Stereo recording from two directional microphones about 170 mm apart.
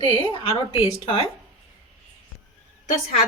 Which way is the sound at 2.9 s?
50° left (ahead or behind).